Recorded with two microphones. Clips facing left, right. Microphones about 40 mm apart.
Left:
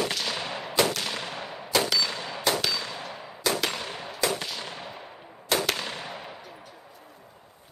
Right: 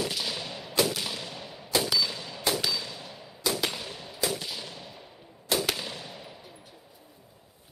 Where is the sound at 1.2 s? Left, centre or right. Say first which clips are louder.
Left 5 dB; left.